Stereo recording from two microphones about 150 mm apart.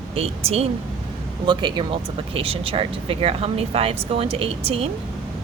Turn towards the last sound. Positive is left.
turn(degrees=-40)  # may be behind; listen again after turning